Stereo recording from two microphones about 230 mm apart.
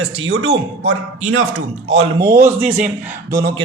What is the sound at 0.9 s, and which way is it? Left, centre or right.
Speech, right.